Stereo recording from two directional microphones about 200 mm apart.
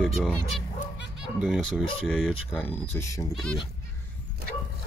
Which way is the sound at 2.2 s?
10° left (ahead or behind).